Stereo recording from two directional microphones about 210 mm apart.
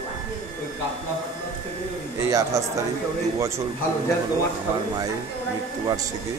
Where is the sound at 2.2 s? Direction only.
15° right (ahead or behind).